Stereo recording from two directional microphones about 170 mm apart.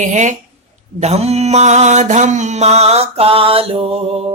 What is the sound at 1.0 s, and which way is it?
Mantra, 40° right (ahead or behind).